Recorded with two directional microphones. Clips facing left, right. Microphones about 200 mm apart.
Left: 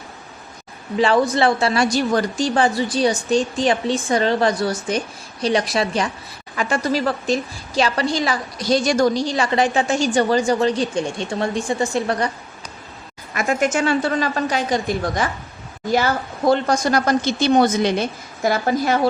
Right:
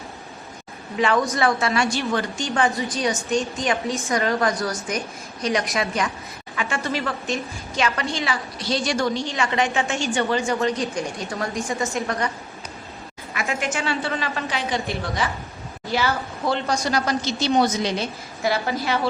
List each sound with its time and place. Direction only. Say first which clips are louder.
0.9 s a woman's voice: left 4 dB; 30° left (ahead or behind)
13.3 s a woman's voice: left 7 dB; 45° left (ahead or behind)